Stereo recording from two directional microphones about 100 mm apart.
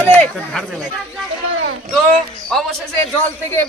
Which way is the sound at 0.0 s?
10° left (ahead or behind).